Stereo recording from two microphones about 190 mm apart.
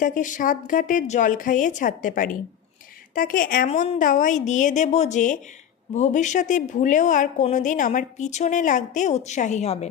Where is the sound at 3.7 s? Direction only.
40° left (ahead or behind).